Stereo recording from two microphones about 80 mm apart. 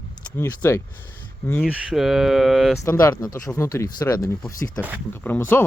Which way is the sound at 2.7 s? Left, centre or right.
Left.